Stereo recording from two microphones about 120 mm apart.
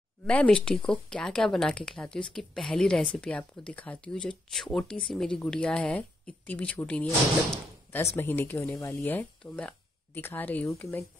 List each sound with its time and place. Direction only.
0.3 s speech: 10° left (ahead or behind)